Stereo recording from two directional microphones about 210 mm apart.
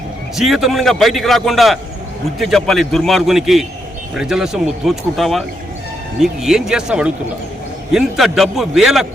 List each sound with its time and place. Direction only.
0.3 s a man's voice: centre (ahead or behind)